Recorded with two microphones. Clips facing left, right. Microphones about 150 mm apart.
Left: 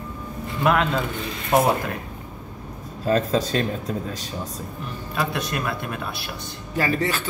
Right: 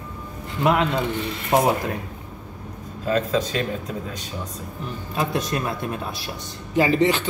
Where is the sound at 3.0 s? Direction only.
40° left (ahead or behind).